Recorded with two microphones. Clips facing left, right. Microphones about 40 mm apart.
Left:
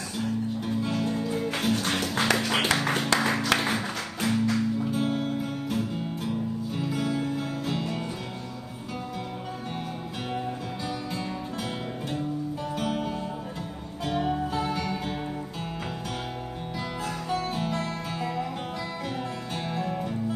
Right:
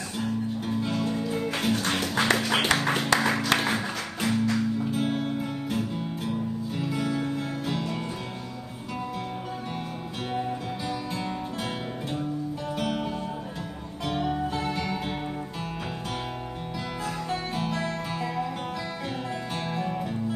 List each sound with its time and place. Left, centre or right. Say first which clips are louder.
0.2 s music: even; centre
5.0 s music: even; right
5.4 s music: even; centre
6.9 s music: even; right
7.7 s music: even; centre
12.7 s music: even; centre
14.3 s music: even; centre
18.2 s music: even; centre
19.7 s music: left 1 dB; centre